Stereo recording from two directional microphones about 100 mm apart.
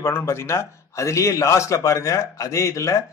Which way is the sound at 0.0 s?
25° left (ahead or behind).